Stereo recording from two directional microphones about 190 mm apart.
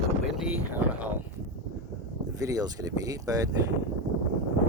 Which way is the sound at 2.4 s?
20° right (ahead or behind).